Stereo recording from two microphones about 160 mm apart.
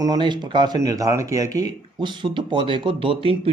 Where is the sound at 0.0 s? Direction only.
25° right (ahead or behind).